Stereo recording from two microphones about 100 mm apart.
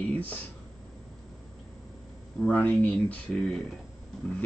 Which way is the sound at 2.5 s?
15° left (ahead or behind).